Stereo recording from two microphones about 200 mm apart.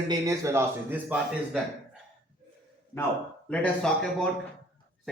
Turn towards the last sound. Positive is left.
turn(degrees=5)  # may be behind; listen again after turning